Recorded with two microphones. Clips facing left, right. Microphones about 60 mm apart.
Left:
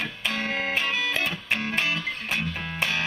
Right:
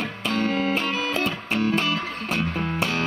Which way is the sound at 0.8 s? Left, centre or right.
Right.